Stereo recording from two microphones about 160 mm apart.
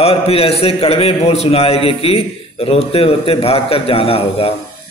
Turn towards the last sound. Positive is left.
turn(degrees=35)  # may be behind; listen again after turning